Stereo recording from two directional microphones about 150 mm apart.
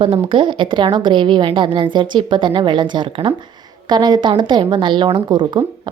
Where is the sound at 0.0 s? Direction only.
35° right (ahead or behind).